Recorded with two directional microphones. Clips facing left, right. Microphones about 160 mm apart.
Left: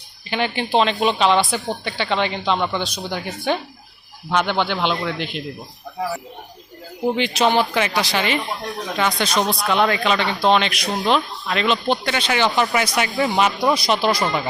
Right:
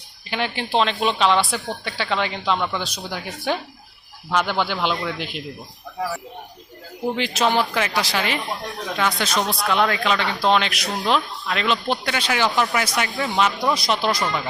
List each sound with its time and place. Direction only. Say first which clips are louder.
0.3 s speech: left 3 dB; centre (ahead or behind)
7.2 s speech: left 2 dB; centre (ahead or behind)
13.1 s speech: left 3 dB; 10° left (ahead or behind)
13.7 s speech: left 3 dB; centre (ahead or behind)
14.2 s speech: left 3 dB; 25° left (ahead or behind)